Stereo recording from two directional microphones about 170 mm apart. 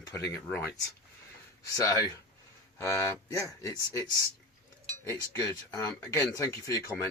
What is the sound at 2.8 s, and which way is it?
Speech, 15° left (ahead or behind).